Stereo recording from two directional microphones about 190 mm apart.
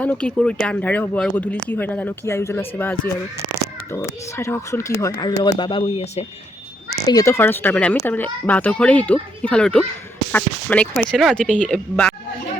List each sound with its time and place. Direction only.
0.0 s speech: 5° left (ahead or behind); by 6.2 s 30° left (ahead or behind)
7.0 s speech: 20° left (ahead or behind)